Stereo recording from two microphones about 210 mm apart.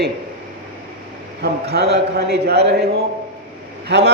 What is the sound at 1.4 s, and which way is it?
A man's voice, 50° right (ahead or behind).